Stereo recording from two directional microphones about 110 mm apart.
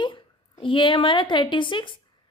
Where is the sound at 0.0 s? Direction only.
45° left (ahead or behind).